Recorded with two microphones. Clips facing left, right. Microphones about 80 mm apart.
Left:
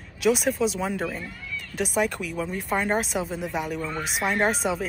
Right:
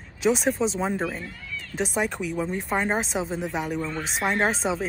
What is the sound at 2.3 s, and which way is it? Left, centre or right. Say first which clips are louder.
Speech: right 2 dB; right.